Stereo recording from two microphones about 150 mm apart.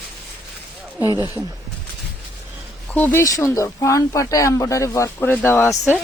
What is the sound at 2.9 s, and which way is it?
Speech, 10° left (ahead or behind).